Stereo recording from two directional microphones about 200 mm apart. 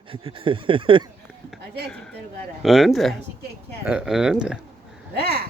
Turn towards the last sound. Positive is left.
turn(degrees=-50)  # may be behind; listen again after turning